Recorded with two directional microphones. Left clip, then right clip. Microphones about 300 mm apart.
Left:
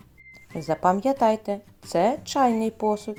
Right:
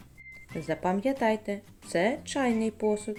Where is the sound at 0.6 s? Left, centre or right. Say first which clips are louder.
Left 7 dB; centre.